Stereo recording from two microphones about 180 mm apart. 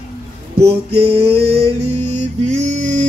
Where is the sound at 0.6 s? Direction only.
35° right (ahead or behind).